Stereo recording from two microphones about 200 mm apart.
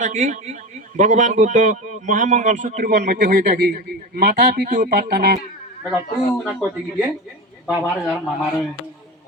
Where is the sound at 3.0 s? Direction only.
50° right (ahead or behind).